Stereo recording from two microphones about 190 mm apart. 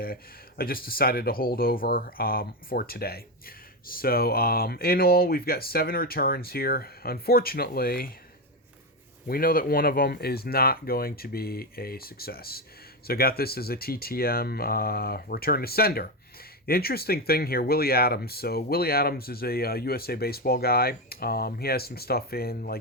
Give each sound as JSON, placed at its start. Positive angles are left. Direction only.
{"t": 0.0, "sound": "speech", "side_deg": 50}
{"t": 9.2, "sound": "speech", "side_deg": 50}